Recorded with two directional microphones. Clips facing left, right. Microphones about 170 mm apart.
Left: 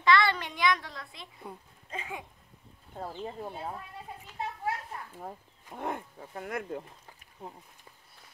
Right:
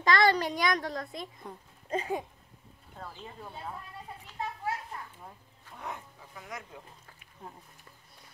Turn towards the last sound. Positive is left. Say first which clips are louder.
# left 8 dB
turn(degrees=55)  # may be behind; listen again after turning